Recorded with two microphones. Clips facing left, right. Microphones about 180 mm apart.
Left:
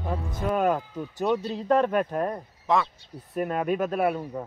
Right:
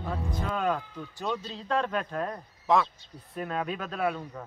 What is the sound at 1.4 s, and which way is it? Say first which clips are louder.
Speech: left 7 dB; 50° left (ahead or behind).